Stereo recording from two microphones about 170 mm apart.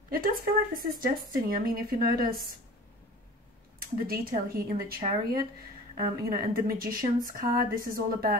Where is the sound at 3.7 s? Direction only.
60° right (ahead or behind).